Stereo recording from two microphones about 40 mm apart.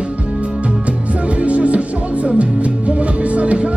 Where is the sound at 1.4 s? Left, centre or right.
Right.